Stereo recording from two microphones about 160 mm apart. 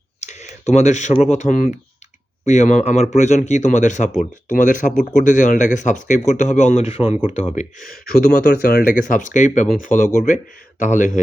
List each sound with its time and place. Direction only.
0.2 s speech: 45° left (ahead or behind)
2.4 s speech: 45° left (ahead or behind)
7.9 s speech: 70° left (ahead or behind); by 11.1 s 50° left (ahead or behind)